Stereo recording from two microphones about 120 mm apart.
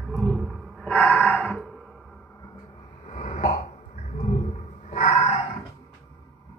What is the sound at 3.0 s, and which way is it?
Throat clearing, 85° left.